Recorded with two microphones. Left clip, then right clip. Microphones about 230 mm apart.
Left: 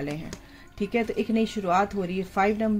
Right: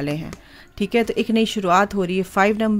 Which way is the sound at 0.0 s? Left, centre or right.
Right.